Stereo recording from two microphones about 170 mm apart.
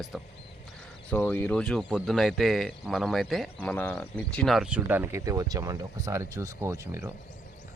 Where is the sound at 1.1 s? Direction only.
10° left (ahead or behind); by 7.1 s 15° right (ahead or behind).